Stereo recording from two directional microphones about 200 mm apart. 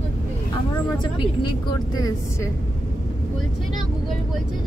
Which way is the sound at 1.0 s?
25° left (ahead or behind).